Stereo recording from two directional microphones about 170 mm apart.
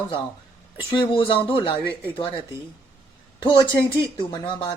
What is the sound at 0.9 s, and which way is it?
A woman's voice, 30° left (ahead or behind).